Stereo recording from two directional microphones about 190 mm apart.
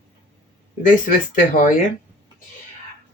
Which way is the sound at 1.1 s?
45° left (ahead or behind).